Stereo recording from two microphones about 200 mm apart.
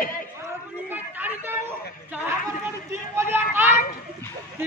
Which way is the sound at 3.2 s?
10° right (ahead or behind).